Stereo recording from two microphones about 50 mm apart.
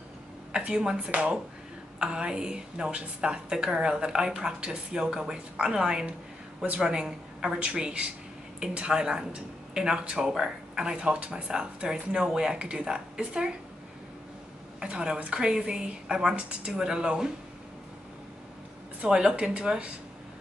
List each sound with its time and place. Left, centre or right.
0.5 s a woman's voice: centre
14.8 s a woman's voice: centre
19.0 s speech: centre